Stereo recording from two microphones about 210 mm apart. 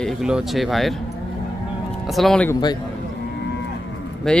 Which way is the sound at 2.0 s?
Centre (ahead or behind).